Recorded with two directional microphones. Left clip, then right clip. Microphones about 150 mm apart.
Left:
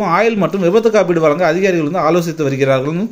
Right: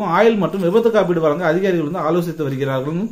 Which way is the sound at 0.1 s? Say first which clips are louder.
Right 1 dB; 20° left (ahead or behind).